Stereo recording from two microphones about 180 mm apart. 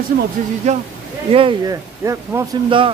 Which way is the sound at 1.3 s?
30° right (ahead or behind).